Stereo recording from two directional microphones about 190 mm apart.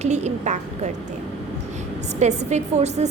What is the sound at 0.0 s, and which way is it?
Speech, 35° right (ahead or behind).